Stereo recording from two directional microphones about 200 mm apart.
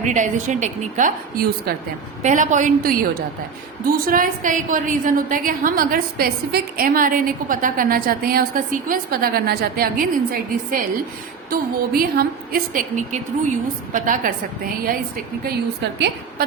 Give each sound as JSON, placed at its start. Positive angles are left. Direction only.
{"t": 0.0, "sound": "a woman's voice", "side_deg": -40}